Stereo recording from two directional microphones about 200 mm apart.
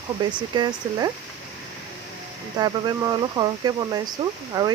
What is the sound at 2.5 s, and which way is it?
Speech, 20° right (ahead or behind).